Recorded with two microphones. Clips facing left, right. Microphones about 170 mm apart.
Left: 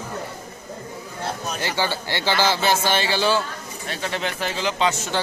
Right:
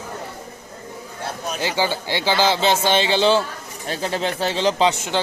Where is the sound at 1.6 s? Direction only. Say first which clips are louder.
Right 4 dB; 15° right (ahead or behind).